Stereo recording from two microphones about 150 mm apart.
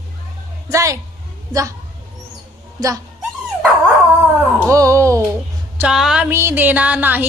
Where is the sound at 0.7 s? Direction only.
20° right (ahead or behind).